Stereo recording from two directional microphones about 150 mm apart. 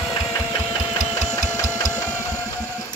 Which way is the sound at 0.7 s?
25° left (ahead or behind).